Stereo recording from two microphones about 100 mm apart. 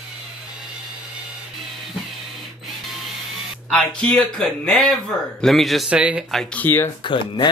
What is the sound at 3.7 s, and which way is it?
A man's voice, 10° left (ahead or behind).